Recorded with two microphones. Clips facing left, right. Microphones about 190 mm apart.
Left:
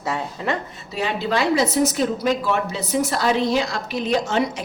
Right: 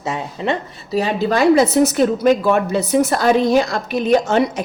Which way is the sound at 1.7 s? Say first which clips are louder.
Right 5 dB; 65° right (ahead or behind).